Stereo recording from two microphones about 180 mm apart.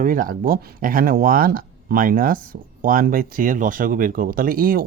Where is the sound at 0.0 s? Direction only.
50° right (ahead or behind).